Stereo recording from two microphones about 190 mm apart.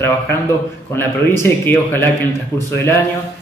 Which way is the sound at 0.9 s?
10° left (ahead or behind).